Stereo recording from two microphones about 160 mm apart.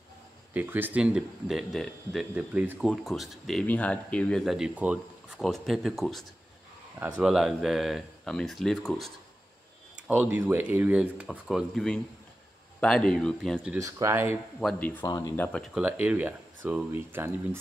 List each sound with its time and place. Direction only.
0.5 s speech: 10° right (ahead or behind)
2.9 s speech: centre (ahead or behind)
9.9 s speech: 10° right (ahead or behind)
13.7 s speech: 20° right (ahead or behind)
14.8 s speech: 10° left (ahead or behind)
15.0 s speech: 25° left (ahead or behind)
15.3 s speech: 10° left (ahead or behind)
15.7 s speech: 10° right (ahead or behind)